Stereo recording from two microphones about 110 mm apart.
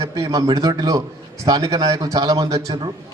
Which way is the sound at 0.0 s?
30° right (ahead or behind).